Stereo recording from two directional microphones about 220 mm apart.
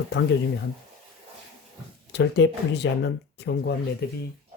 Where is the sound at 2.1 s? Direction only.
50° left (ahead or behind).